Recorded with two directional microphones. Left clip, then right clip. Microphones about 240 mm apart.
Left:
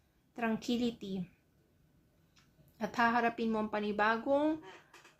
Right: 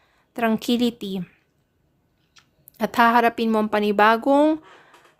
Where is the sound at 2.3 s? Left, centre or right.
Right.